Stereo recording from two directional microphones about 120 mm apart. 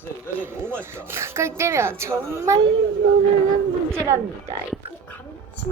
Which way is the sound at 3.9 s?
25° right (ahead or behind).